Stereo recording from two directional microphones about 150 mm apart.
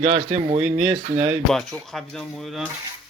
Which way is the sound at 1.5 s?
Centre (ahead or behind).